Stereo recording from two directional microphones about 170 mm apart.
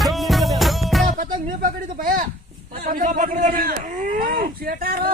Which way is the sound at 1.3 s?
55° right (ahead or behind).